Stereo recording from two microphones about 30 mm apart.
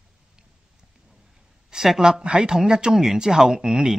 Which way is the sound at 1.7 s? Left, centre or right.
Centre.